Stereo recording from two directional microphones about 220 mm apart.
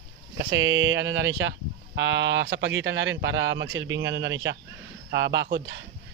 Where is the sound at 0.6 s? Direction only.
60° right (ahead or behind).